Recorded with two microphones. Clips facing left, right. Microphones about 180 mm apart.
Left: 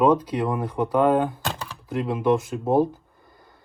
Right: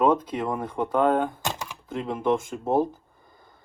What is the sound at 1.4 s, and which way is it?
Typing, 15° right (ahead or behind).